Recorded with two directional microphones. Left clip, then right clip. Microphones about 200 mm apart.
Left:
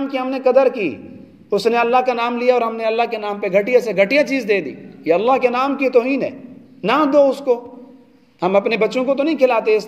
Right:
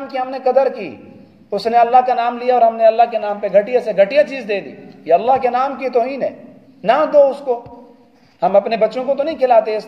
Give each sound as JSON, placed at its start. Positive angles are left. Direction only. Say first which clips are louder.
{"t": 0.1, "sound": "a man's voice", "louder": "even", "side_deg": 40}